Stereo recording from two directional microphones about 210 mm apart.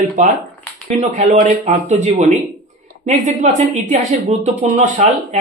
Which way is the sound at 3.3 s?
35° right (ahead or behind).